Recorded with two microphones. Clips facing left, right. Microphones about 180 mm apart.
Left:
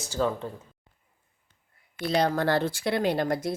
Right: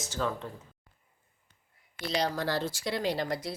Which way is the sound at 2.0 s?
55° left (ahead or behind).